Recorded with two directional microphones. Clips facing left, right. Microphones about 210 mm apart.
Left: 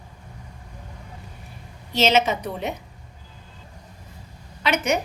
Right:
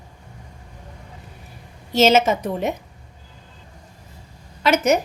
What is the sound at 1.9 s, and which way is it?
Speech, 45° right (ahead or behind).